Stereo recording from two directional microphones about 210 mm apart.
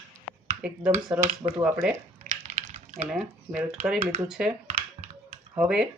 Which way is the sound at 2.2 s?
35° right (ahead or behind).